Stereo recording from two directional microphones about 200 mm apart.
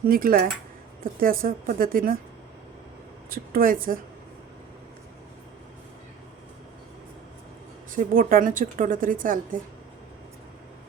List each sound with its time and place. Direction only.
0.1 s a woman's voice: 45° right (ahead or behind)
3.2 s a woman's voice: 45° right (ahead or behind)
7.9 s a woman's voice: 45° right (ahead or behind)